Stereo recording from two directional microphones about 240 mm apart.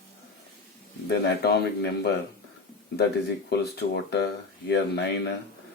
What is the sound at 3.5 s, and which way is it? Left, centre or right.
Speech, left.